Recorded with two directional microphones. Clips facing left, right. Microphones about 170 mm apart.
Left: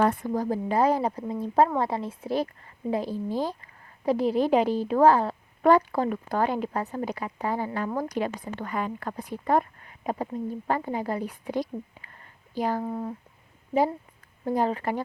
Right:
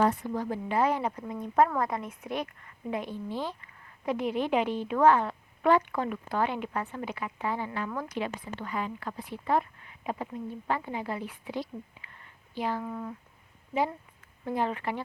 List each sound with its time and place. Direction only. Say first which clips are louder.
0.0 s a woman's voice: left 2 dB; 55° left (ahead or behind)
0.3 s a woman's voice: left 4 dB; 40° left (ahead or behind)
14.4 s a woman's voice: left 5 dB; 40° left (ahead or behind)